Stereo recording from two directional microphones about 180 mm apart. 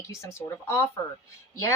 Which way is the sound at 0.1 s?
15° left (ahead or behind).